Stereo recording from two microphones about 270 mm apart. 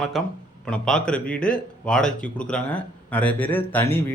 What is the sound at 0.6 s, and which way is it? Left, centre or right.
Speech, centre.